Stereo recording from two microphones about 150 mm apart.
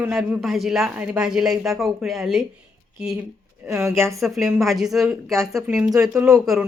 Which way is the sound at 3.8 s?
20° right (ahead or behind).